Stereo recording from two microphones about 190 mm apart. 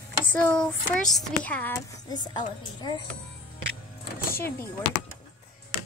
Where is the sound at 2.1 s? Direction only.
20° left (ahead or behind).